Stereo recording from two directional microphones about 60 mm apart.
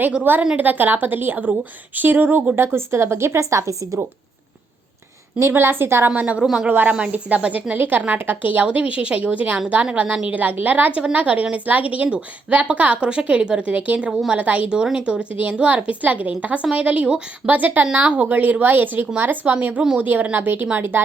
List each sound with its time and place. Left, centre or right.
0.5 s a woman's voice: right
2.6 s speech: right
5.4 s a woman's voice: right
6.1 s a woman's voice: right
6.4 s speech: centre
6.7 s a woman's voice: right